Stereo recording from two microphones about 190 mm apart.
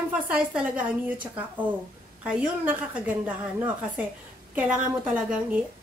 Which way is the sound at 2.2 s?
5° right (ahead or behind).